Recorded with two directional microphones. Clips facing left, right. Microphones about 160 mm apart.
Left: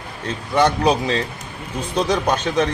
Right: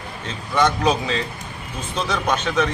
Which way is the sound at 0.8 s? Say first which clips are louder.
Left 2 dB; 35° left (ahead or behind).